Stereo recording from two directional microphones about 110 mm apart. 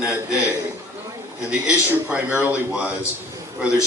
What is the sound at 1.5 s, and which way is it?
A man's voice, 10° right (ahead or behind).